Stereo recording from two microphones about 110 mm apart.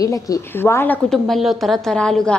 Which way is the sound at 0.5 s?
20° left (ahead or behind).